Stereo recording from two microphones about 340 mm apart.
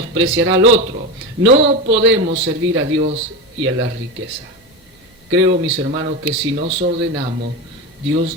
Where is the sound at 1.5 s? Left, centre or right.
Centre.